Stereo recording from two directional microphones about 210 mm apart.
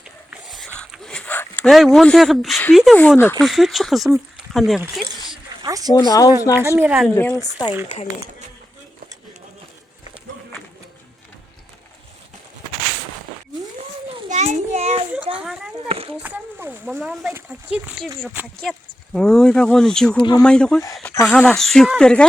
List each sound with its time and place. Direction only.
0.0 s a sound: centre (ahead or behind)
3.4 s speech: centre (ahead or behind)
5.6 s speech: 15° right (ahead or behind)
5.9 s speech: 15° left (ahead or behind)
6.6 s a woman's voice: 10° right (ahead or behind)
7.1 s speech: 10° left (ahead or behind)
13.7 s children playing: 35° right (ahead or behind)
15.4 s a sound: 5° right (ahead or behind)
15.9 s a child's voice: 25° right (ahead or behind)
16.2 s speech: 10° right (ahead or behind)
19.1 s speech: 5° left (ahead or behind)